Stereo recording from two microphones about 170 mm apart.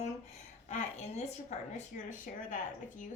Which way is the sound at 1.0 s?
40° left (ahead or behind).